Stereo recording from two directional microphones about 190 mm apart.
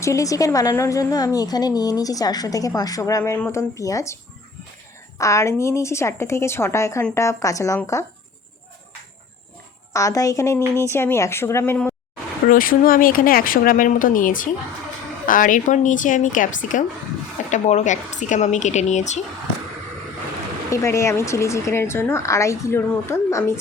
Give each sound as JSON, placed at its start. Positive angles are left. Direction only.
{"t": 0.0, "sound": "a woman's voice", "side_deg": 15}
{"t": 9.9, "sound": "a woman's voice", "side_deg": 15}
{"t": 12.5, "sound": "speech", "side_deg": 50}
{"t": 20.7, "sound": "a woman's voice", "side_deg": 15}